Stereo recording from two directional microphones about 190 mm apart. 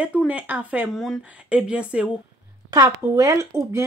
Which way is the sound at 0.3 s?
10° right (ahead or behind).